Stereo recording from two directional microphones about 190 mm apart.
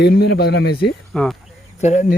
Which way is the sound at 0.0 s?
60° left (ahead or behind).